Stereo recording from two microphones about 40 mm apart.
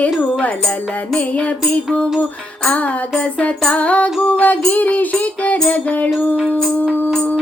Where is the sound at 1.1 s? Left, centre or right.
Left.